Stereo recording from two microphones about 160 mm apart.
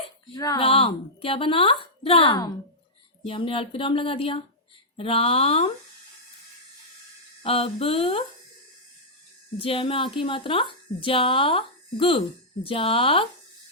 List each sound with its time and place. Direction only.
0.3 s speech: 25° left (ahead or behind)
0.6 s a woman's voice: 35° left (ahead or behind)
7.4 s a woman's voice: 35° left (ahead or behind)
9.6 s a woman's voice: 35° left (ahead or behind)